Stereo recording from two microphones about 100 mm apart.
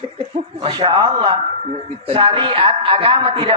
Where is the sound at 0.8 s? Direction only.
65° right (ahead or behind).